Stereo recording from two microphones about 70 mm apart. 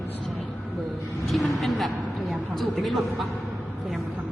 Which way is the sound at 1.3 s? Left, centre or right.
Centre.